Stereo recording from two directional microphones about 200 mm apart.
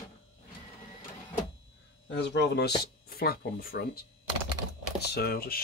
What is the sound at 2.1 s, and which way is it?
Speech, 60° left (ahead or behind).